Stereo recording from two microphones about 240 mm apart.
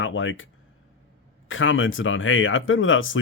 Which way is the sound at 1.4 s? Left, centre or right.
Left.